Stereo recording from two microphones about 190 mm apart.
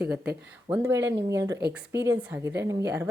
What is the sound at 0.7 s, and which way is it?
Speech, 15° right (ahead or behind).